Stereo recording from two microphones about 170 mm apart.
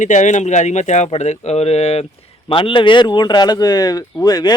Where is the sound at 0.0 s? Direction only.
45° left (ahead or behind).